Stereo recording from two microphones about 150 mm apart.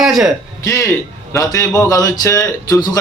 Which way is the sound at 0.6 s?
20° left (ahead or behind).